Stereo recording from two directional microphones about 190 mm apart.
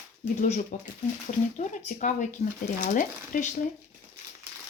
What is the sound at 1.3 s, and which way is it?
Speech, 40° left (ahead or behind).